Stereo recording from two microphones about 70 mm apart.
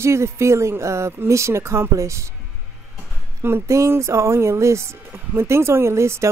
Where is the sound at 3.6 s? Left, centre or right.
Right.